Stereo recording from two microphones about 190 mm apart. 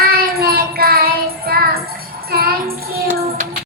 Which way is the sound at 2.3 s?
55° right (ahead or behind).